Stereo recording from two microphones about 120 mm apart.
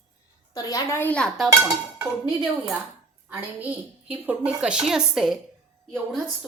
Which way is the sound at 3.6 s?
10° right (ahead or behind).